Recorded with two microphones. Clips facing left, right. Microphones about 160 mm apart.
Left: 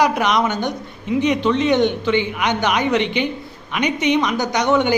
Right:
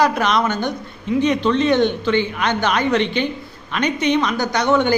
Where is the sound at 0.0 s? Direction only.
15° left (ahead or behind).